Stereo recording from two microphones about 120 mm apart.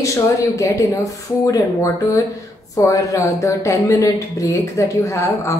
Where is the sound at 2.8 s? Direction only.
25° left (ahead or behind).